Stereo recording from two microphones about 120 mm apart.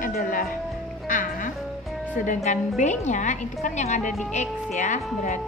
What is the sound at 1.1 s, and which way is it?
Music, 90° left.